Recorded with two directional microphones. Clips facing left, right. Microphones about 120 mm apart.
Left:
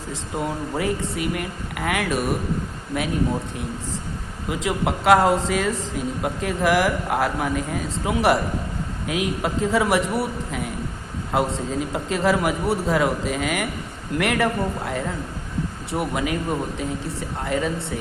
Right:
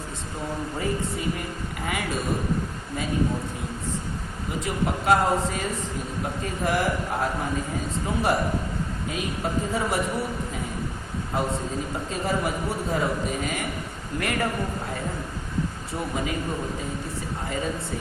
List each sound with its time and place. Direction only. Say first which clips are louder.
0.8 s speech: left 4 dB; 80° left
4.4 s a man's voice: left 4 dB; 90° left; by 17.9 s 75° left (ahead or behind)